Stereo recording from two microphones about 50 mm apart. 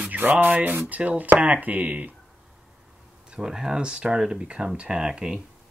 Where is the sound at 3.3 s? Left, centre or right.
Centre.